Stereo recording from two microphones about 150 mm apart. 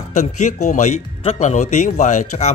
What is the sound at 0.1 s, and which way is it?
A man's voice, 50° left (ahead or behind).